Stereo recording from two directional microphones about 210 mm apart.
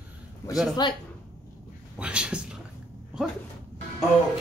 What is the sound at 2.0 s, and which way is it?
Speech, 5° right (ahead or behind).